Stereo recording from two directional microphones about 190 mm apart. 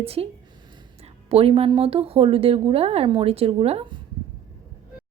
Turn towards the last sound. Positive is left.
turn(degrees=-30)  # may be behind; listen again after turning